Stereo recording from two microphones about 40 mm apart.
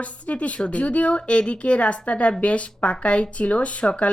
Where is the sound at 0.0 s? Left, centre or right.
Left.